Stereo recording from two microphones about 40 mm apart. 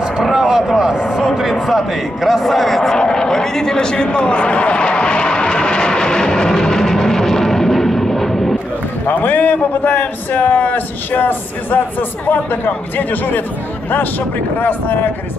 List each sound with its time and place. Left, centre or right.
0.3 s speech: centre
3.0 s a sound: centre
9.0 s a man's voice: left
14.6 s a man's voice: left